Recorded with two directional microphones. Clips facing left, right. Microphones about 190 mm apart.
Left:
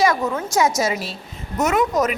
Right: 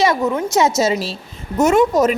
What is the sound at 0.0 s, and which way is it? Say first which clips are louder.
A woman's voice: right 3 dB; 20° right (ahead or behind).